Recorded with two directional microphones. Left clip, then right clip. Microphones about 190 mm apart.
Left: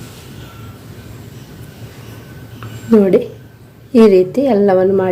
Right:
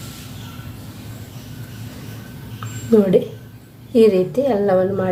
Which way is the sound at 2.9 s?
30° left (ahead or behind).